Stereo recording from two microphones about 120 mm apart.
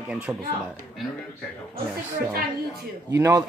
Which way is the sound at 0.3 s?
10° right (ahead or behind).